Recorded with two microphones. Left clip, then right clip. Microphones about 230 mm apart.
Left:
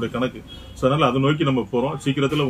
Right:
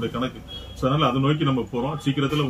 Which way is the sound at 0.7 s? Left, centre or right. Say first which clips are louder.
Left 3 dB; centre.